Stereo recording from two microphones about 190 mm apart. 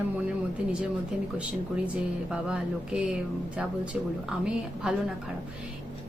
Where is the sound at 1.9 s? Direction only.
5° right (ahead or behind).